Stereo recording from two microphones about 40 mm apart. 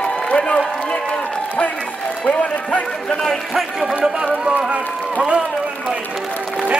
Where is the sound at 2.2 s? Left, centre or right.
Left.